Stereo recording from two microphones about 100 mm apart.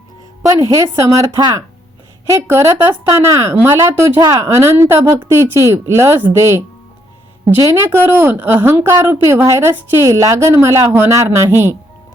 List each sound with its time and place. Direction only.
0.4 s a woman's voice: 30° right (ahead or behind)
7.9 s a woman's voice: 20° right (ahead or behind)